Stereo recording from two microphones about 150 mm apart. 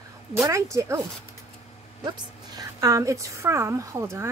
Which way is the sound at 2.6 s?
20° right (ahead or behind).